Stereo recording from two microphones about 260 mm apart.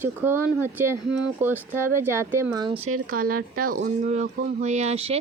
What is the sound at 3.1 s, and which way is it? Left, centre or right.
Speech, right.